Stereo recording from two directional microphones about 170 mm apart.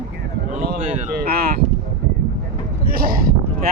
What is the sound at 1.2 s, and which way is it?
Speech, 65° right (ahead or behind).